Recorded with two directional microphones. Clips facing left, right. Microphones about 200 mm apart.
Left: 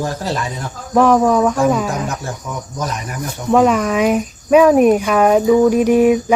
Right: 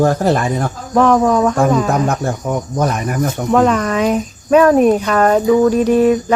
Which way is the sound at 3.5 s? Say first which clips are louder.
Left 1 dB; 5° left (ahead or behind).